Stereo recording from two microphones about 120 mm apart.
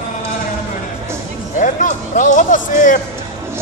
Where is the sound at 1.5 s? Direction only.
90° left.